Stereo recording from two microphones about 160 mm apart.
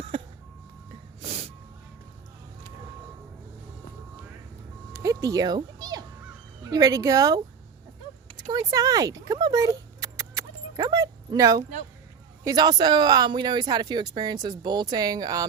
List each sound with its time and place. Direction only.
0.1 s vehicle: 35° right (ahead or behind)
4.9 s music: 20° right (ahead or behind)
6.7 s speech: 20° right (ahead or behind)
8.5 s speech: 20° right (ahead or behind)